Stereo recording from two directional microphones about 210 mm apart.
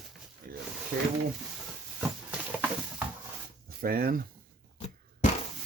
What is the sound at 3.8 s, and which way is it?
Speech, 45° right (ahead or behind).